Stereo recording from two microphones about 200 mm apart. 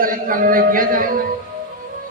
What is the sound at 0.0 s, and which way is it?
A man's voice, 45° right (ahead or behind).